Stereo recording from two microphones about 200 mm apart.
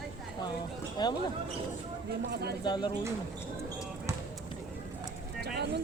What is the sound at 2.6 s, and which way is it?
Speech, 20° left (ahead or behind).